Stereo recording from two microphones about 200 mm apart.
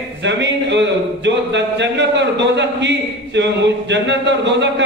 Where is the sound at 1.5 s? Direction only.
60° right (ahead or behind).